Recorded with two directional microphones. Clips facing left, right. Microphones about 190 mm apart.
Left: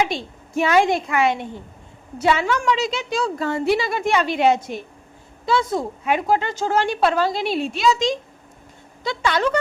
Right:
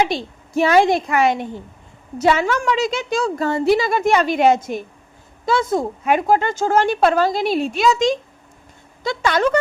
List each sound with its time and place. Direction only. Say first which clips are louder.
0.0 s a woman's voice: right 3 dB; 35° right (ahead or behind)